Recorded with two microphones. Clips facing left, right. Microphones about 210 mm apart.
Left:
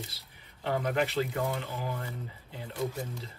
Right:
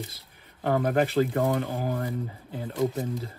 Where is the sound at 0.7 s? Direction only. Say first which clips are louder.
Right 6 dB; 50° right (ahead or behind).